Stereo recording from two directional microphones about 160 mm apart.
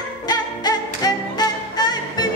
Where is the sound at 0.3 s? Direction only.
25° left (ahead or behind).